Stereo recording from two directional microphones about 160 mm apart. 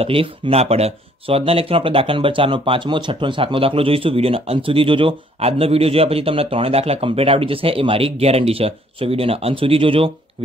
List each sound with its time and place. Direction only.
0.0 s speech: 35° right (ahead or behind)